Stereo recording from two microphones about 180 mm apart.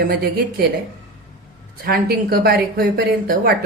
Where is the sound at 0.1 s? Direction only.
55° right (ahead or behind).